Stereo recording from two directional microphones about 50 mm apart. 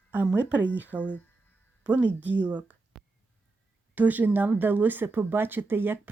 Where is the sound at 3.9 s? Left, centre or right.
Right.